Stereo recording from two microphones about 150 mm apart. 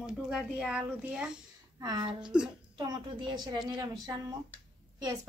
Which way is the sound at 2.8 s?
30° right (ahead or behind).